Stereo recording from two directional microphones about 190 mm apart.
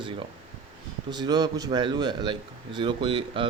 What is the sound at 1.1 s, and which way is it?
A man's voice, 20° right (ahead or behind).